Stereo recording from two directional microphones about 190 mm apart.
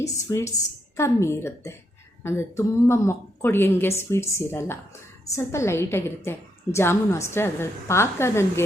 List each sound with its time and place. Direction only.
0.0 s a woman's voice: 15° left (ahead or behind)